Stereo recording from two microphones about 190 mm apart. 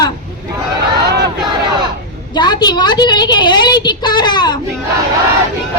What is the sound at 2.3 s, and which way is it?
A woman's voice, 20° left (ahead or behind).